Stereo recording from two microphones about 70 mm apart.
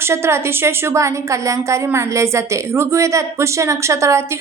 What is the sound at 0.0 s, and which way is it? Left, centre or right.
A woman's voice, right.